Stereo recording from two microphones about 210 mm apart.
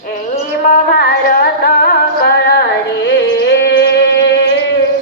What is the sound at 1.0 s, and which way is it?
Music, 45° left (ahead or behind).